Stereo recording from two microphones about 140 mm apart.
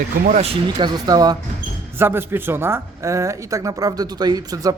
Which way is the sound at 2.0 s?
15° right (ahead or behind).